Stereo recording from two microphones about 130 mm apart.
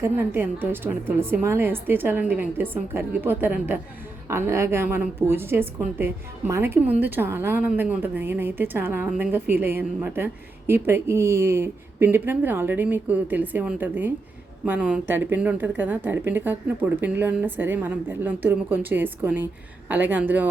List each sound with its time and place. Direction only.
0.0 s a woman's voice: 15° right (ahead or behind)